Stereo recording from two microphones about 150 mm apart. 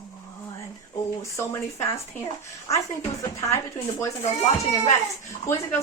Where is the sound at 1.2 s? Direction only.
20° left (ahead or behind).